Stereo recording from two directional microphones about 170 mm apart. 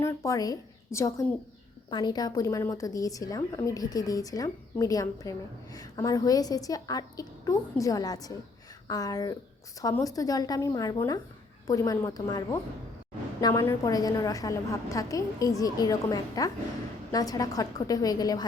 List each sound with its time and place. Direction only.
0.0 s a woman's voice: 20° left (ahead or behind)